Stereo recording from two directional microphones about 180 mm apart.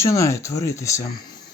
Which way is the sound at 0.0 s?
15° left (ahead or behind).